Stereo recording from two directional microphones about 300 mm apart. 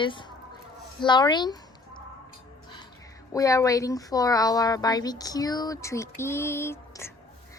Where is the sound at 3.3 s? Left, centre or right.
Centre.